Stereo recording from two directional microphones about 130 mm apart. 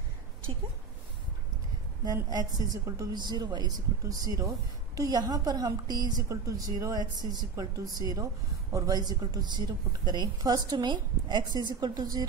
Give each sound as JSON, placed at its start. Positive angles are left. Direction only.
{"t": 2.2, "sound": "a woman's voice", "side_deg": -30}